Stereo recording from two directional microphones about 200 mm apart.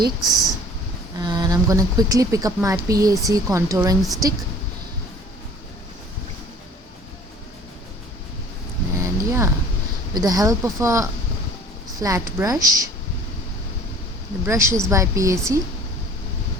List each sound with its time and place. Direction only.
0.2 s speech: centre (ahead or behind)
1.2 s speech: 20° right (ahead or behind)
9.0 s a sound: 15° right (ahead or behind)
10.2 s speech: 20° right (ahead or behind)
14.4 s speech: 15° right (ahead or behind)